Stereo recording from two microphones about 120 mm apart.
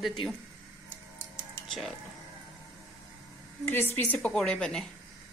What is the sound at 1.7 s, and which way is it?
Speech, centre (ahead or behind).